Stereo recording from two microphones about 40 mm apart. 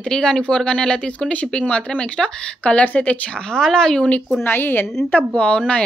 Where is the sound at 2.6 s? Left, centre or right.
Left.